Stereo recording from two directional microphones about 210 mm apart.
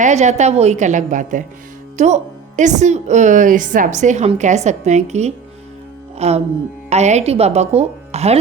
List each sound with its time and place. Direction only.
0.0 s a woman's voice: 35° right (ahead or behind)
6.1 s music: 30° right (ahead or behind)
6.9 s a woman's voice: 30° right (ahead or behind)